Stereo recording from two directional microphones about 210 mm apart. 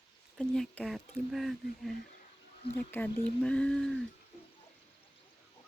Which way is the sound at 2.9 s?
10° left (ahead or behind).